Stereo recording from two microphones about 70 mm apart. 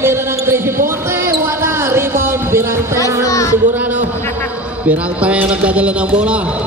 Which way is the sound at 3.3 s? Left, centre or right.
Left.